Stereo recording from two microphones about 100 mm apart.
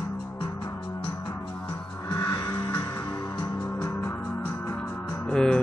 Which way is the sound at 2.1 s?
40° left (ahead or behind).